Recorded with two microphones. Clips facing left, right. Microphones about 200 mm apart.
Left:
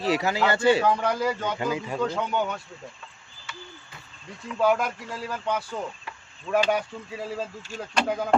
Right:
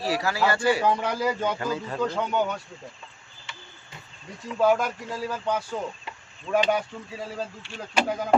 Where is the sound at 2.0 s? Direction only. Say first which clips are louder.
Right 2 dB; centre (ahead or behind).